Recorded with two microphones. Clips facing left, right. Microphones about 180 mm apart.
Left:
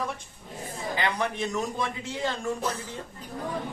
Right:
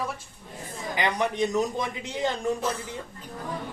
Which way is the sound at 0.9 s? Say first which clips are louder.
Right 3 dB; 15° right (ahead or behind).